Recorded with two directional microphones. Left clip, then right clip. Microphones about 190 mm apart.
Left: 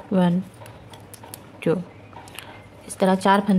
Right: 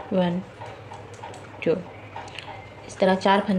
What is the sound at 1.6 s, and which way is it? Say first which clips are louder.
Speech: left 1 dB; 40° left (ahead or behind).